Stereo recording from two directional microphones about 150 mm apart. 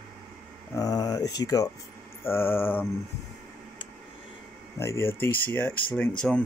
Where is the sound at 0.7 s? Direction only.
25° left (ahead or behind).